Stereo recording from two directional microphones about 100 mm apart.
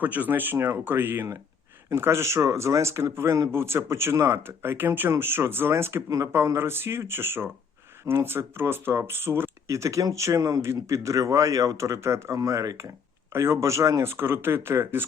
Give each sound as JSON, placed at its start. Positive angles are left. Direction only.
{"t": 0.0, "sound": "speech", "side_deg": -15}